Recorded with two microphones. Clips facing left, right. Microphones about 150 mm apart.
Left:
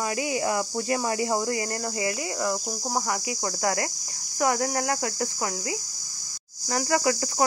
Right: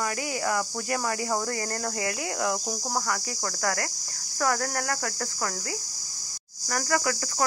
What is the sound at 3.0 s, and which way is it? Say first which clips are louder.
Speech: left 2 dB; 20° left (ahead or behind).